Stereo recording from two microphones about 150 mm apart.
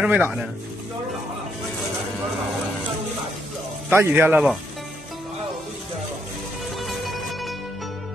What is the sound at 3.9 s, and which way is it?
Speech, 15° right (ahead or behind).